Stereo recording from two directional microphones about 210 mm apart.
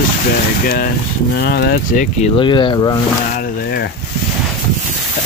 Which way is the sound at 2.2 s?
25° left (ahead or behind).